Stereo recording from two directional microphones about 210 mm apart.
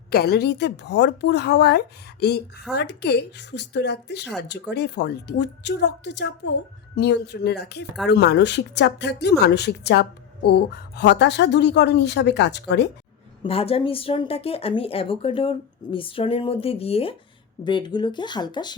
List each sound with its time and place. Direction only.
0.1 s speech: 50° left (ahead or behind)
13.4 s a woman's voice: 25° left (ahead or behind)